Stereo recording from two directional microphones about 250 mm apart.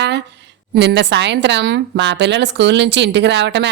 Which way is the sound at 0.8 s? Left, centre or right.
Right.